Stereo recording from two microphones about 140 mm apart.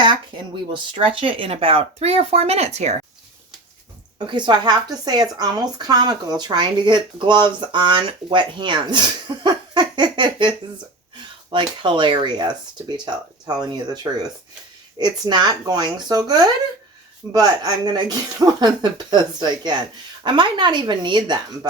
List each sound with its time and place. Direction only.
0.7 s speech: 40° right (ahead or behind); by 3.0 s 55° right (ahead or behind)
4.3 s speech: 35° right (ahead or behind)
11.5 s speech: 35° right (ahead or behind)